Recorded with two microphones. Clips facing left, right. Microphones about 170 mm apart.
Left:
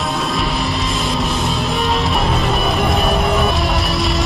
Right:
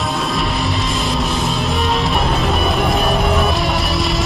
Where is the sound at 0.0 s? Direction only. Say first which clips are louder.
Even; centre (ahead or behind).